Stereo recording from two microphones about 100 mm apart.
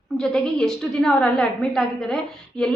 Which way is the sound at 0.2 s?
5° left (ahead or behind).